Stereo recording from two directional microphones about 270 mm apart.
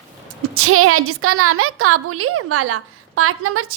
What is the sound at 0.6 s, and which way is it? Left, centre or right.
A woman's voice, right.